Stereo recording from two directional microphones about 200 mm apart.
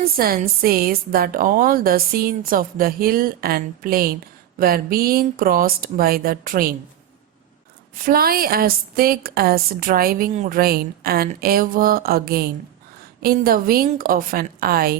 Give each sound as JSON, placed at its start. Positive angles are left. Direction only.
{"t": 0.0, "sound": "a woman's voice", "side_deg": -45}
{"t": 7.9, "sound": "a woman's voice", "side_deg": -45}